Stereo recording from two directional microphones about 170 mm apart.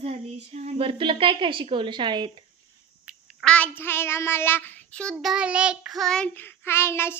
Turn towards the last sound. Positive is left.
turn(degrees=15)  # may be behind; listen again after turning